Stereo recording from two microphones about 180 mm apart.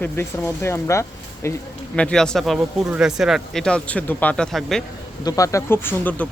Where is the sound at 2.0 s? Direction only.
5° left (ahead or behind).